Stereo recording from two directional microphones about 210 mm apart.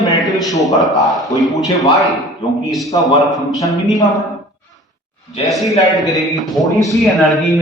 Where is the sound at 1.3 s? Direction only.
15° left (ahead or behind).